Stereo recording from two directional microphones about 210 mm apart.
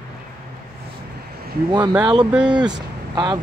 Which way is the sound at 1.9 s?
5° right (ahead or behind).